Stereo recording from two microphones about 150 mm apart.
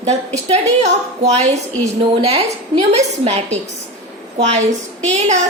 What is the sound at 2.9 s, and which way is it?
Speech, 45° right (ahead or behind).